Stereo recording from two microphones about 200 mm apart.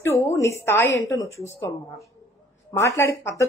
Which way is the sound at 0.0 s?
15° left (ahead or behind).